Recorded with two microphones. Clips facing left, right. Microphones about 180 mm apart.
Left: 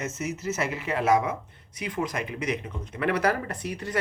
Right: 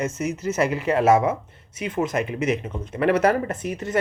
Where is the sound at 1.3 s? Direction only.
25° right (ahead or behind).